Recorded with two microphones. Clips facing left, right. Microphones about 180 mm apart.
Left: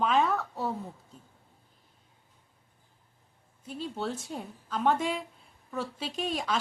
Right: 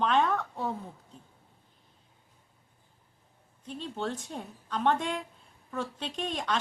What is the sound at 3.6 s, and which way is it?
A woman's voice, 5° left (ahead or behind).